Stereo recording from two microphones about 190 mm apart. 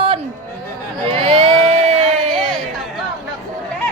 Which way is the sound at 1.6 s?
35° right (ahead or behind).